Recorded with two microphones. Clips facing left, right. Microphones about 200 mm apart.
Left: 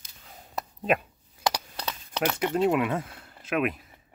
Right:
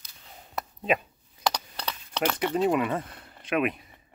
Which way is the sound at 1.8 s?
5° left (ahead or behind).